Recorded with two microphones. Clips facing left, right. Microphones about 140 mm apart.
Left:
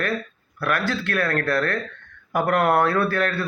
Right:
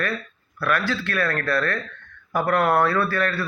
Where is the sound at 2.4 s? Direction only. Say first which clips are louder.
Even; 50° left (ahead or behind).